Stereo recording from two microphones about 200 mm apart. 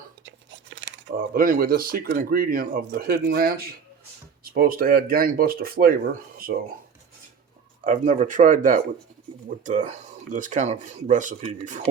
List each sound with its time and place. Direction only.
0.3 s tearing: 70° right (ahead or behind)
1.1 s speech: 45° right (ahead or behind)
7.9 s speech: 40° right (ahead or behind)